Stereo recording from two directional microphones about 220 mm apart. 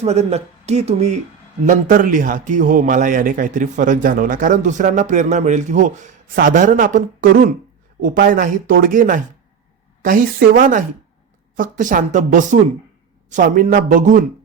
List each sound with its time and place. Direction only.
0.0 s a man's voice: 30° right (ahead or behind)